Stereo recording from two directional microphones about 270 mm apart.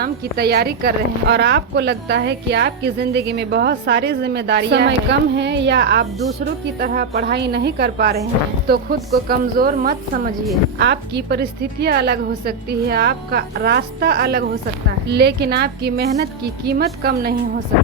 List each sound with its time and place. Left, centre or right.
0.0 s a woman's voice: right